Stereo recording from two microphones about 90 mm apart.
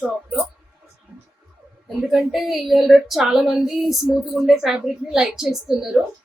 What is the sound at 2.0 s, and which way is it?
Speech, 5° right (ahead or behind).